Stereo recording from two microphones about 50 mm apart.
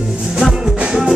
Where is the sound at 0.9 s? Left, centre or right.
Centre.